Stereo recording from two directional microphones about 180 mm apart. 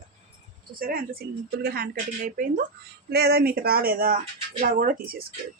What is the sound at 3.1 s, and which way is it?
A woman's voice, 60° right (ahead or behind).